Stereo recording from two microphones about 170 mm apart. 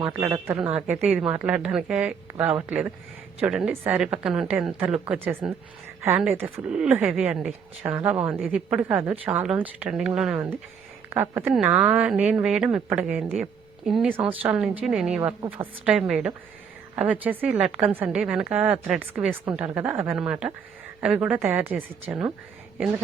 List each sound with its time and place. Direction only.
0.1 s a woman's voice: 15° right (ahead or behind)